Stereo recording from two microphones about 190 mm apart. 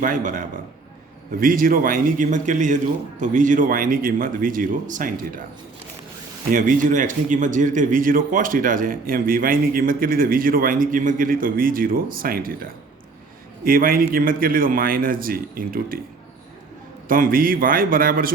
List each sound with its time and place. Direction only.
0.0 s a man's voice: 45° right (ahead or behind)
6.5 s a man's voice: 45° right (ahead or behind)
17.1 s a man's voice: 50° right (ahead or behind)